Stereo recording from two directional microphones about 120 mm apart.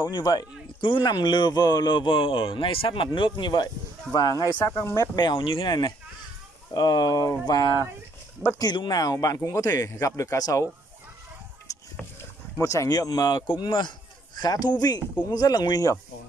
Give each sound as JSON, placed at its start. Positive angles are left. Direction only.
{"t": 0.0, "sound": "speech", "side_deg": 35}
{"t": 11.7, "sound": "a sound", "side_deg": 30}
{"t": 12.5, "sound": "speech", "side_deg": 25}